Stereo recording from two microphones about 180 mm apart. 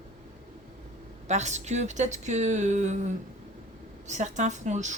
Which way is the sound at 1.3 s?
40° right (ahead or behind).